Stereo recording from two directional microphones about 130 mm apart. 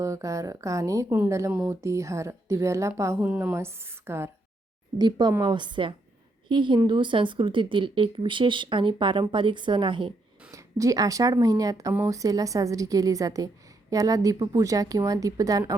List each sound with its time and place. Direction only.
0.0 s a woman's voice: 25° right (ahead or behind)
3.2 s a woman's voice: 10° right (ahead or behind)
4.9 s a woman's voice: 35° right (ahead or behind)
10.5 s a woman's voice: 25° right (ahead or behind)